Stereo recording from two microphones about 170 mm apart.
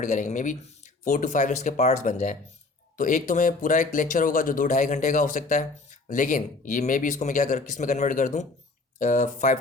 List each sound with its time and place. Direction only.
0.0 s speech: 45° left (ahead or behind)